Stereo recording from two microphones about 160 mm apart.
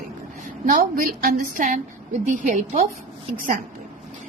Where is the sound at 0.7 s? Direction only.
65° right (ahead or behind).